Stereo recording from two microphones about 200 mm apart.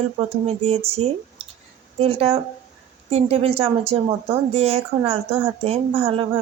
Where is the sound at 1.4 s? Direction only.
30° right (ahead or behind).